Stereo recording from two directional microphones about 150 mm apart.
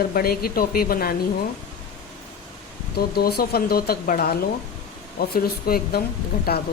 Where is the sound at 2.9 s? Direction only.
90° left.